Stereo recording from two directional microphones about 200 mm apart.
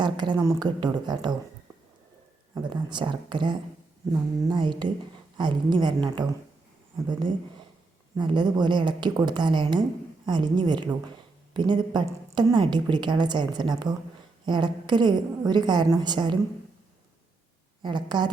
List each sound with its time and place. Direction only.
0.0 s a woman's voice: 20° right (ahead or behind)
2.6 s a woman's voice: 20° right (ahead or behind)
8.1 s a woman's voice: 20° right (ahead or behind)
17.8 s a woman's voice: 20° right (ahead or behind)